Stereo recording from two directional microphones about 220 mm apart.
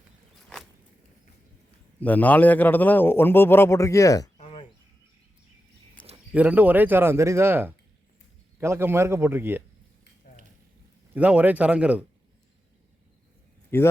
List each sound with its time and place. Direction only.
2.0 s a man's voice: 5° left (ahead or behind)
4.4 s a sound: 25° left (ahead or behind)
6.3 s speech: 5° right (ahead or behind)
11.1 s speech: 5° right (ahead or behind)
13.7 s a man's voice: 10° left (ahead or behind)